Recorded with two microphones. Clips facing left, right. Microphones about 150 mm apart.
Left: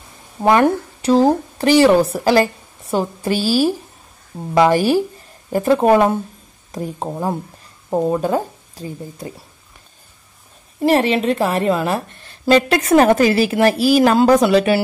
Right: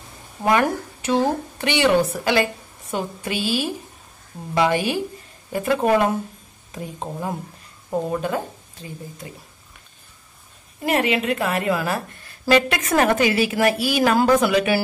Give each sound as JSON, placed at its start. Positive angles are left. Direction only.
{"t": 0.4, "sound": "a woman's voice", "side_deg": 30}
{"t": 10.8, "sound": "a woman's voice", "side_deg": 30}